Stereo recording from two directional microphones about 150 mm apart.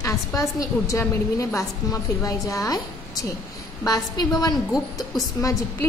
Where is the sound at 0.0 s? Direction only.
20° left (ahead or behind).